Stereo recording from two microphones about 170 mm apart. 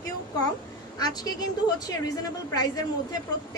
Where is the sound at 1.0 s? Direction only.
25° left (ahead or behind).